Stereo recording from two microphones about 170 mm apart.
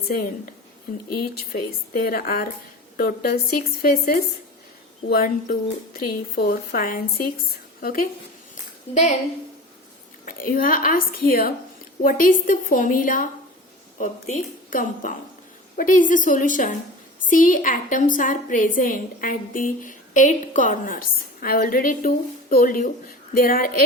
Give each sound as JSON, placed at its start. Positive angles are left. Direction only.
{"t": 0.1, "sound": "a woman's voice", "side_deg": 60}
{"t": 10.2, "sound": "a woman's voice", "side_deg": 55}